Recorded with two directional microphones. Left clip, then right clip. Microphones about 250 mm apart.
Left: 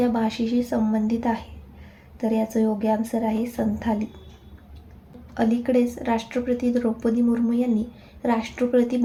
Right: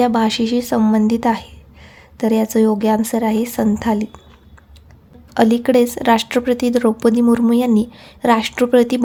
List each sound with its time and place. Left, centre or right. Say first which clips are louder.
0.0 s speech: right 8 dB; right
5.3 s speech: right 8 dB; right